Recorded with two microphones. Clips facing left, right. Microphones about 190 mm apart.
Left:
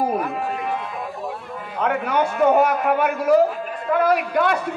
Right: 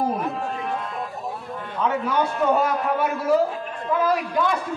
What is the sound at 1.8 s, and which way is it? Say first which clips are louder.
A man's voice: left 2 dB; 65° left (ahead or behind).